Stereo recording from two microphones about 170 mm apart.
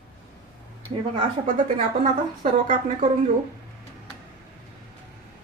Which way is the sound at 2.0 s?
40° right (ahead or behind).